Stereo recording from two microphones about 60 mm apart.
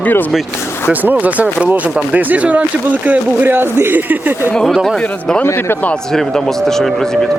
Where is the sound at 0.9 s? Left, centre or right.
Right.